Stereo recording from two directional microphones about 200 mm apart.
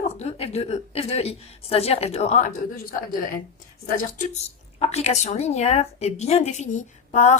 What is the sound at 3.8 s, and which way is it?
A woman's voice, 40° left (ahead or behind).